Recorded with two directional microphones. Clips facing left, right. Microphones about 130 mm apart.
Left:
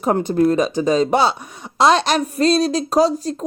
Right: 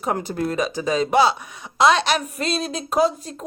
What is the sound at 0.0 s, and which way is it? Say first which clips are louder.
Speech: left 8 dB; 30° left (ahead or behind).